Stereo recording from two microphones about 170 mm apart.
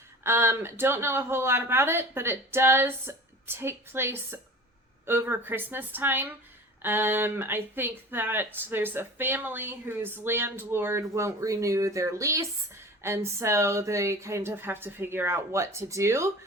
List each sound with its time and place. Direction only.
0.2 s speech: 15° right (ahead or behind)